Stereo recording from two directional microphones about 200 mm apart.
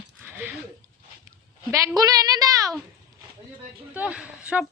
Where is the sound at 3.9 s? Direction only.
5° right (ahead or behind).